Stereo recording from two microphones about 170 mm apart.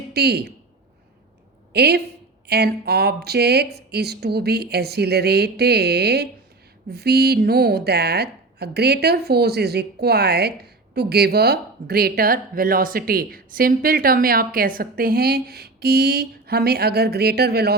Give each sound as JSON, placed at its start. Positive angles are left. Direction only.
{"t": 0.1, "sound": "speech", "side_deg": -75}
{"t": 1.7, "sound": "a woman's voice", "side_deg": -70}